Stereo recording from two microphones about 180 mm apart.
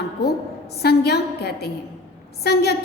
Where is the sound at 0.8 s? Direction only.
60° left (ahead or behind).